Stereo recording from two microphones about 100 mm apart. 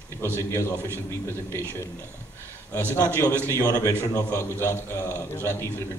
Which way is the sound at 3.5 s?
35° left (ahead or behind).